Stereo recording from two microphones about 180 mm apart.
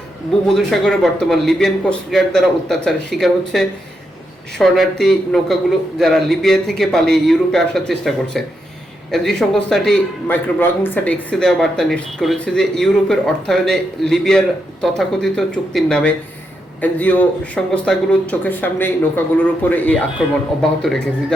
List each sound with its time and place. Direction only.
0.4 s a man's voice: centre (ahead or behind)